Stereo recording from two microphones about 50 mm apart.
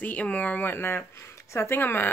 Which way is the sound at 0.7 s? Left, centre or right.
Left.